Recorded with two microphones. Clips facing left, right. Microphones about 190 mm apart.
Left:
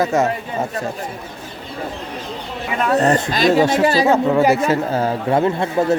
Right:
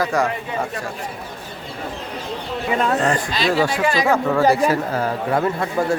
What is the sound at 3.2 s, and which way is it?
A man's voice, 45° left (ahead or behind).